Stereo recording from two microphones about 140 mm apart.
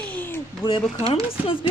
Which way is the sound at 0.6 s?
40° left (ahead or behind).